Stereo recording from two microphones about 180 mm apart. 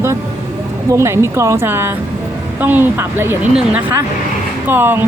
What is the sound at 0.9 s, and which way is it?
A woman's voice, 15° right (ahead or behind).